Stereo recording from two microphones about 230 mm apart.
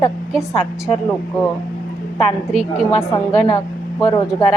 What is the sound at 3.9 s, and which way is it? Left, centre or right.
Speech, centre.